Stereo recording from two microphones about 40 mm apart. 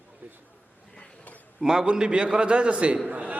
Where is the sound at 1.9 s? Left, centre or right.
Right.